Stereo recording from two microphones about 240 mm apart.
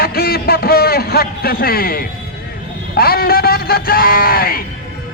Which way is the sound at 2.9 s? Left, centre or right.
Left.